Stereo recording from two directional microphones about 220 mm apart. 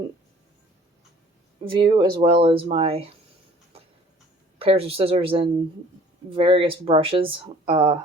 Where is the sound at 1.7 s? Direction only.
25° right (ahead or behind).